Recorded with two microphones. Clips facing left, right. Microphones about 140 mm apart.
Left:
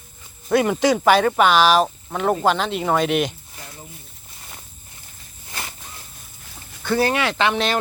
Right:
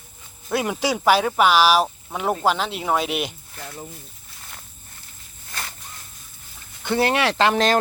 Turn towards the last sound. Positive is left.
turn(degrees=-40)  # may be behind; listen again after turning